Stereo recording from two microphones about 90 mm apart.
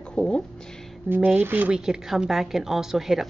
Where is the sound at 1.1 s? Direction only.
20° right (ahead or behind).